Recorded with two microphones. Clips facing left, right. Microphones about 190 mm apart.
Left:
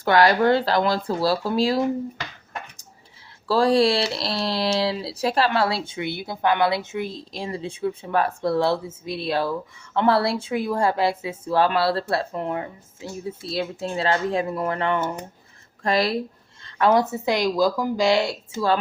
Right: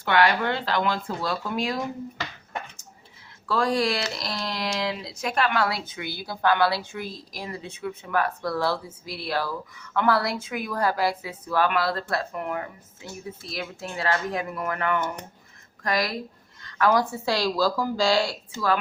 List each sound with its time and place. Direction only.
0.0 s speech: 35° left (ahead or behind)
3.4 s speech: 30° left (ahead or behind)